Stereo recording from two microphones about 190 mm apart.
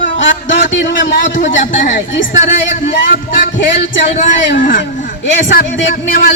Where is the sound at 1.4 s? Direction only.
40° left (ahead or behind).